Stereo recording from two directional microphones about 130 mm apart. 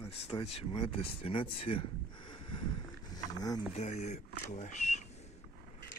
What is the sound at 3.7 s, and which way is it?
Speech, 70° left (ahead or behind).